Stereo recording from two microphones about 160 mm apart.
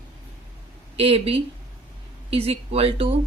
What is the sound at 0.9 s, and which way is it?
Speech, 35° right (ahead or behind).